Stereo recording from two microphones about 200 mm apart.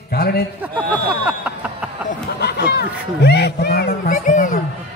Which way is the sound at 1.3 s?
5° right (ahead or behind).